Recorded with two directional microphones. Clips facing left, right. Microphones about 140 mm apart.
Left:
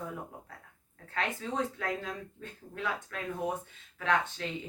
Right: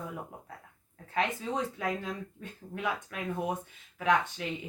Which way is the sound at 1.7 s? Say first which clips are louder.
Right 2 dB; 15° right (ahead or behind).